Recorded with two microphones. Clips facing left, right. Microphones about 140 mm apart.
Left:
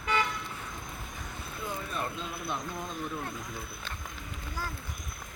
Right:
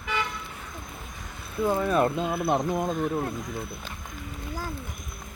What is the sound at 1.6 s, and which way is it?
Speech, 55° right (ahead or behind).